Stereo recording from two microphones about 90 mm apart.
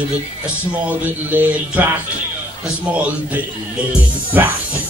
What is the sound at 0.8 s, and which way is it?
Speech, 20° right (ahead or behind).